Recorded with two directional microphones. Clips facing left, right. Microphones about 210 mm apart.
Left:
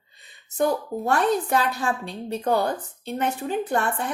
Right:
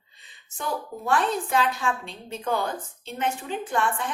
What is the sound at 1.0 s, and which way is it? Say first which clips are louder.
A woman's voice: left 3 dB; 40° left (ahead or behind).